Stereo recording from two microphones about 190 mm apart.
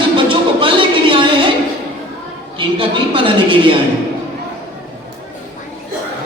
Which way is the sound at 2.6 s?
25° right (ahead or behind).